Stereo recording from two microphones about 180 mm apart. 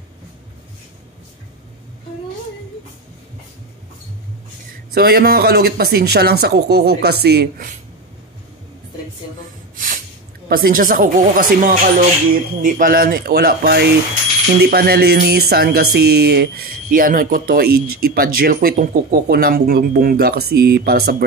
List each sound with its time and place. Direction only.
4.9 s speech: 60° right (ahead or behind)
10.5 s speech: 55° right (ahead or behind)